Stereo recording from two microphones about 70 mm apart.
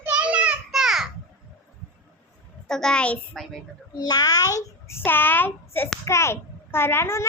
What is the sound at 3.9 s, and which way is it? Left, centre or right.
Speech, left.